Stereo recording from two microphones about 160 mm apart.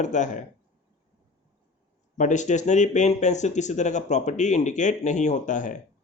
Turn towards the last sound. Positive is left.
turn(degrees=55)  # may be behind; listen again after turning